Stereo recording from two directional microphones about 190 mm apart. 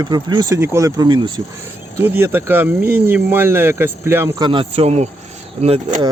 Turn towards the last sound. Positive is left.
turn(degrees=-25)  # may be behind; listen again after turning